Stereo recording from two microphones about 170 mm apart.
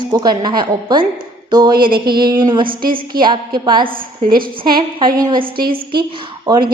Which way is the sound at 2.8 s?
60° right (ahead or behind).